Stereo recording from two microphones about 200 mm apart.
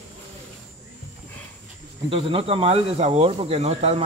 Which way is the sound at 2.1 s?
30° right (ahead or behind).